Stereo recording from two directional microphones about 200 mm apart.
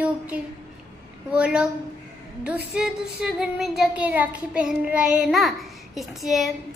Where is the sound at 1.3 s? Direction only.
5° right (ahead or behind).